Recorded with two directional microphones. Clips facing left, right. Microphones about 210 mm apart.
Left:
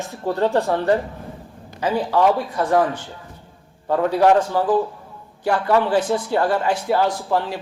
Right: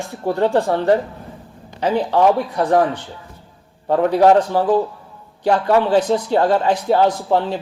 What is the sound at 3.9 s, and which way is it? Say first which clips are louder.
A man's voice: right 3 dB; 25° right (ahead or behind).